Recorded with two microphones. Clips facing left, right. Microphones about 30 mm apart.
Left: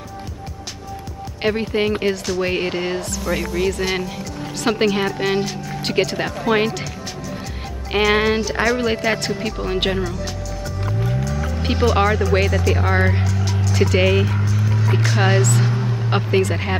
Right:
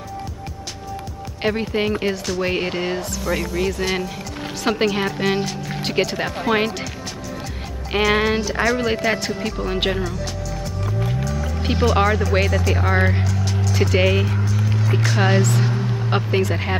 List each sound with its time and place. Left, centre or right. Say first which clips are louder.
1.4 s speech: left 2 dB; centre
7.9 s speech: left 1 dB; centre
11.2 s speech: left 1 dB; centre
15.6 s vehicle: left 1 dB; centre